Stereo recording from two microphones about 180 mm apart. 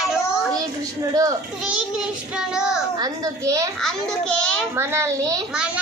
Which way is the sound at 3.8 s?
5° left (ahead or behind).